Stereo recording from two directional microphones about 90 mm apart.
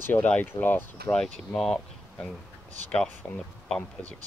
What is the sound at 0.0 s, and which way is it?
Speech, 25° left (ahead or behind).